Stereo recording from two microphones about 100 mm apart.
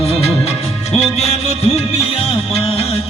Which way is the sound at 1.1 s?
90° left.